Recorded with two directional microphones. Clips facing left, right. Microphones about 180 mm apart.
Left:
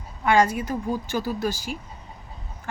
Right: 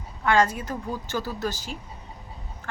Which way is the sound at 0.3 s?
10° left (ahead or behind).